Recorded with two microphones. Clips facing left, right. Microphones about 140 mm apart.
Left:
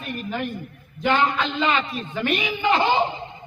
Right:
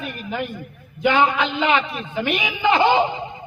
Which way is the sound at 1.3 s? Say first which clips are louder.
Right 3 dB; 70° right (ahead or behind).